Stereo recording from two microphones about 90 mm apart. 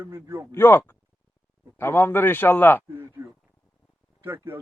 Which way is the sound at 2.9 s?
25° right (ahead or behind).